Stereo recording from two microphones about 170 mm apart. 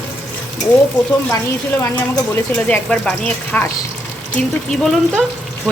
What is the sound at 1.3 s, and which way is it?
Speech, 15° left (ahead or behind).